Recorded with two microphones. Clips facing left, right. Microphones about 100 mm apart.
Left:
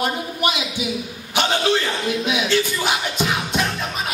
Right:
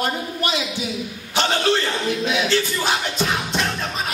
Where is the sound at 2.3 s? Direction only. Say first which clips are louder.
Left 1 dB; 15° left (ahead or behind).